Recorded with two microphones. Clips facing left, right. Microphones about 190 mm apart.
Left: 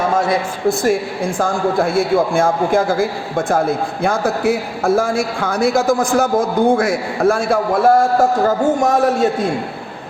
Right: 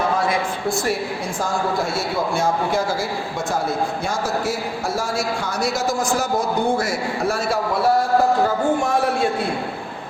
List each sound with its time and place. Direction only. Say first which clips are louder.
0.9 s a man's voice: left 6 dB; 55° left (ahead or behind)